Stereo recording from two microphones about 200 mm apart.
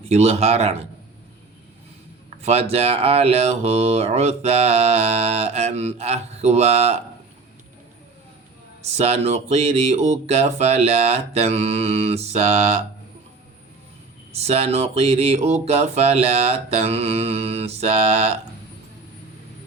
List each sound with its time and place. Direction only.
0.1 s speech: 30° right (ahead or behind)
2.4 s speech: 30° right (ahead or behind)
9.0 s speech: 30° right (ahead or behind)
14.3 s speech: 30° right (ahead or behind)